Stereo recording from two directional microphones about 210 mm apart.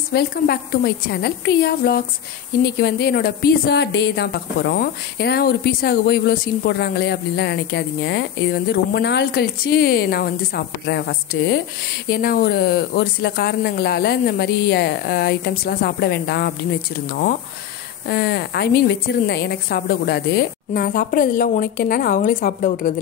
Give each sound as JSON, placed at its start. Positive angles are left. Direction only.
{"t": 0.1, "sound": "speech", "side_deg": 50}